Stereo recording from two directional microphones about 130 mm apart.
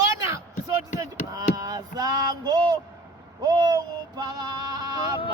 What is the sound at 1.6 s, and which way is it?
Speech, 30° right (ahead or behind).